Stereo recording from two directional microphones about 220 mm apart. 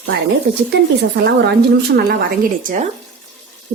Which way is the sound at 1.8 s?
45° right (ahead or behind).